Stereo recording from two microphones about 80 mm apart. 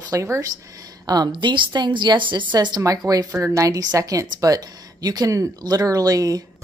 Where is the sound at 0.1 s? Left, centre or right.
Right.